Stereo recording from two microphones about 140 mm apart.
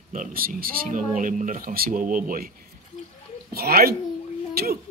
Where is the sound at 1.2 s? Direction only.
70° right (ahead or behind).